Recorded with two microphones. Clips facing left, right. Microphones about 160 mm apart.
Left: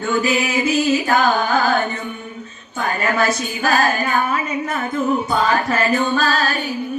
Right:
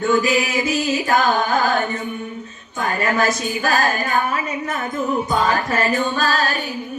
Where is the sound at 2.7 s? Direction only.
40° right (ahead or behind).